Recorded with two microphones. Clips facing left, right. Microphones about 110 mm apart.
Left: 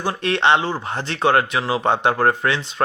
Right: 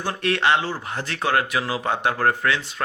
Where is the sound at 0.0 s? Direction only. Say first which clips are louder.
Left 3 dB; 15° left (ahead or behind).